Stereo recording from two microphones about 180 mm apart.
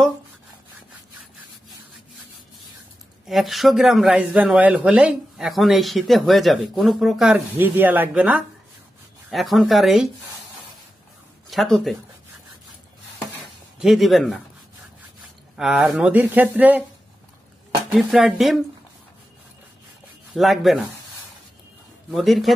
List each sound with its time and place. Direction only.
3.3 s speech: centre (ahead or behind)
11.5 s speech: centre (ahead or behind)
13.7 s speech: centre (ahead or behind)
15.5 s speech: centre (ahead or behind)
17.9 s speech: centre (ahead or behind)
20.3 s speech: centre (ahead or behind)
22.1 s speech: centre (ahead or behind)